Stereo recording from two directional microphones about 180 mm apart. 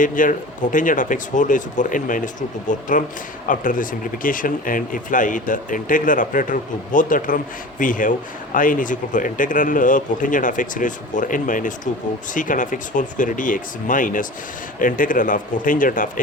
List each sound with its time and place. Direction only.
0.0 s speech: 45° left (ahead or behind)